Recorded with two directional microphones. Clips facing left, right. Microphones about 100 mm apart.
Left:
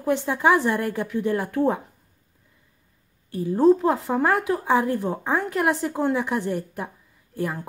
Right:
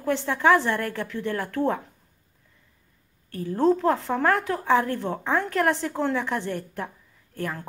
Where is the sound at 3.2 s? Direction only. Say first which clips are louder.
Left 4 dB; 10° left (ahead or behind).